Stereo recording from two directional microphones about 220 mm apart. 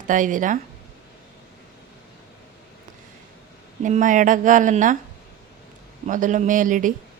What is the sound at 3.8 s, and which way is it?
Speech, 35° right (ahead or behind).